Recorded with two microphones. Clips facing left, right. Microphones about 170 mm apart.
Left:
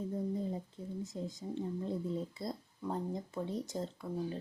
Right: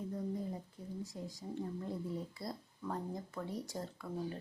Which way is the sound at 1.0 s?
25° left (ahead or behind).